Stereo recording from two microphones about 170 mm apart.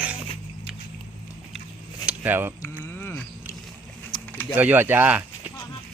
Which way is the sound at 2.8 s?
10° left (ahead or behind).